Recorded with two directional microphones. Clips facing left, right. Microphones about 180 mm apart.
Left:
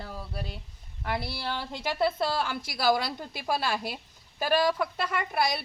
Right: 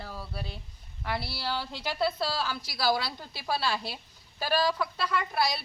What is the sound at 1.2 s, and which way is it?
Speech, 50° left (ahead or behind).